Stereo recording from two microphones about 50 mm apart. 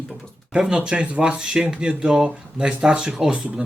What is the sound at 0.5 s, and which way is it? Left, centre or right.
Speech, centre.